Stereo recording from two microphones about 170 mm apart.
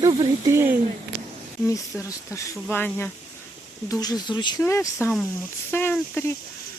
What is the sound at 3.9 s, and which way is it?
Speech, 20° left (ahead or behind).